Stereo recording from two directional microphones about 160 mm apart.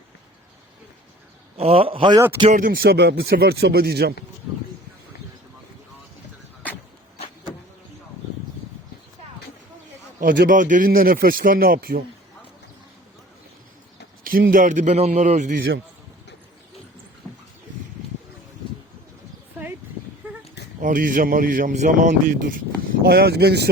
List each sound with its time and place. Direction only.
1.5 s a man's voice: 35° right (ahead or behind)
2.5 s speech: 60° right (ahead or behind); by 4.1 s 75° right (ahead or behind)
10.2 s speech: 60° right (ahead or behind)
14.3 s a man's voice: 60° right (ahead or behind)
20.8 s speech: 55° right (ahead or behind)
23.0 s speech: 80° right